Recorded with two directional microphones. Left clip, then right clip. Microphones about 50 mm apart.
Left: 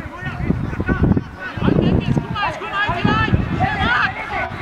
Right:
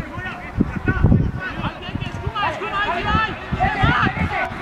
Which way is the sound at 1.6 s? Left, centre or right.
Left.